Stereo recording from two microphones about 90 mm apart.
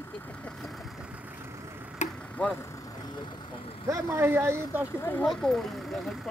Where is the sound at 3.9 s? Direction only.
30° right (ahead or behind).